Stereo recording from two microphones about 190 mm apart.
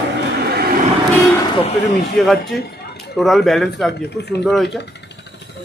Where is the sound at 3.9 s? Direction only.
60° left (ahead or behind).